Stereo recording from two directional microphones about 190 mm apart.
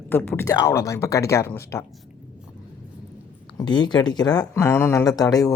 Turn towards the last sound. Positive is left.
turn(degrees=20)  # may be behind; listen again after turning